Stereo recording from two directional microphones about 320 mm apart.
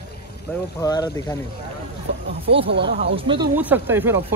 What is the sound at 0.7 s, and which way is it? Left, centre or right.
Speech, centre.